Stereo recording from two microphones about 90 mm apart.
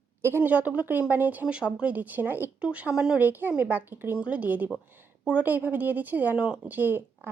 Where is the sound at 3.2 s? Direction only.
20° right (ahead or behind).